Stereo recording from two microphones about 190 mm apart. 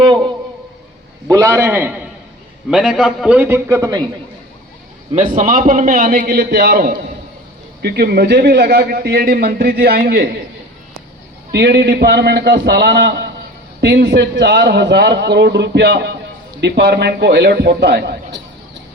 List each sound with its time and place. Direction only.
1.3 s a man's voice: 15° right (ahead or behind)
5.1 s a man's voice: 40° right (ahead or behind); by 10.3 s 60° right (ahead or behind)
11.5 s a man's voice: 60° right (ahead or behind)